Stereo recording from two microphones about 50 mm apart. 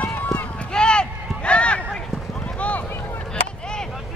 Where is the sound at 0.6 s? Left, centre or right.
Centre.